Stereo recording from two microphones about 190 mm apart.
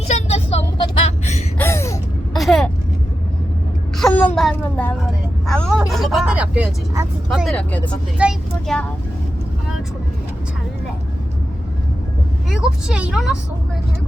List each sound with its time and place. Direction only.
0.1 s vehicle: 35° left (ahead or behind)
1.5 s a sound: 15° left (ahead or behind)
2.3 s vehicle: centre (ahead or behind)
3.9 s a sound: 5° left (ahead or behind)
4.4 s vehicle: 5° left (ahead or behind); by 7.1 s 10° right (ahead or behind)
7.3 s speech: centre (ahead or behind)
12.5 s speech: 5° right (ahead or behind)